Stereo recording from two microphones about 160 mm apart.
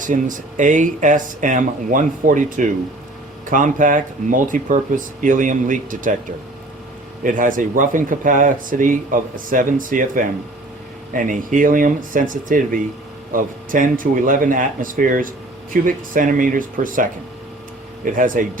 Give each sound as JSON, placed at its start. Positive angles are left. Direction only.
{"t": 0.0, "sound": "speech", "side_deg": -55}
{"t": 7.3, "sound": "speech", "side_deg": -60}